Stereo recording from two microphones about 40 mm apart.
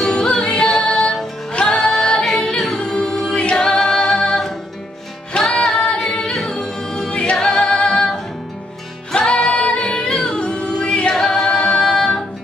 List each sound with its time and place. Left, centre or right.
0.0 s music: centre
1.7 s singing: centre
2.8 s a capella: centre
3.6 s a capella: centre
5.4 s music: centre
5.9 s a capella: centre
6.5 s music: centre
7.3 s music: centre
11.2 s singing: centre
11.8 s music: centre